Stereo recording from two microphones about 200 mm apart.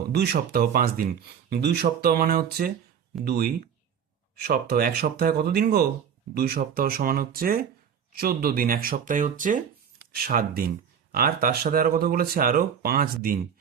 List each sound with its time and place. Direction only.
0.1 s speech: 50° right (ahead or behind)